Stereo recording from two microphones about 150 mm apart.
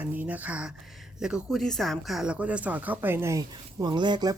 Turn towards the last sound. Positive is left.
turn(degrees=-30)  # may be behind; listen again after turning